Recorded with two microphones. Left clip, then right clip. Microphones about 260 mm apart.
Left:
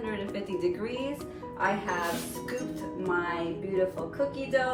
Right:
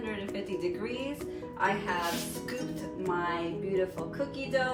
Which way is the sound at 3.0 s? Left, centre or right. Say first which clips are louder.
Left 1 dB; centre.